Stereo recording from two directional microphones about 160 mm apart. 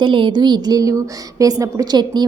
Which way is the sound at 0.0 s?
30° right (ahead or behind).